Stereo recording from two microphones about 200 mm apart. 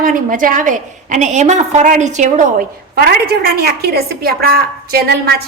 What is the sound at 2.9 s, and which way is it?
A woman's voice, 50° right (ahead or behind).